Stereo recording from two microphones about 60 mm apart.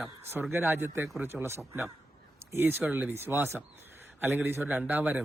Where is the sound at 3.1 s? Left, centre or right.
Right.